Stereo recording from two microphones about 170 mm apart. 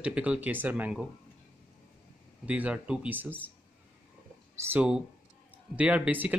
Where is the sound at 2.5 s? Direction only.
10° right (ahead or behind).